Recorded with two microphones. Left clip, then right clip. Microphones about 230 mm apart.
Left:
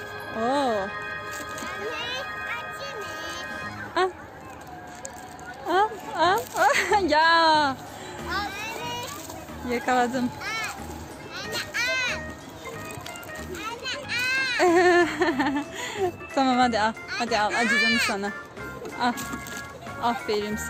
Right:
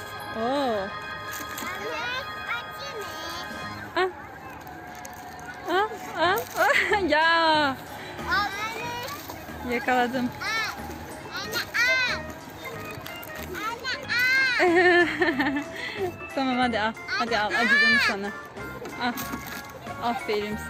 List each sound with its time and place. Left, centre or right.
0.3 s music: centre
5.6 s a sound: centre
8.5 s children playing: left
9.6 s a child's voice: centre
11.5 s children playing: left
13.7 s children playing: left
14.6 s speech: centre
17.5 s speech: centre